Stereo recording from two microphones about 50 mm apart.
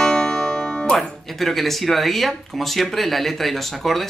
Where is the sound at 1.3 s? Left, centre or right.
Centre.